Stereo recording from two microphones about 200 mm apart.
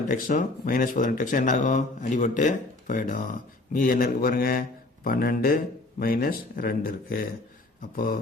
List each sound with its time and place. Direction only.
0.1 s speech: 45° left (ahead or behind)